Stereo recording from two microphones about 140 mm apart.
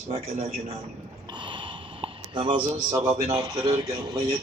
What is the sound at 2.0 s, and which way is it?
A man's voice, 35° right (ahead or behind).